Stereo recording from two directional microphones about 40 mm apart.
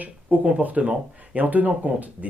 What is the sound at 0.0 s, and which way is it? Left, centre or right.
Speech, right.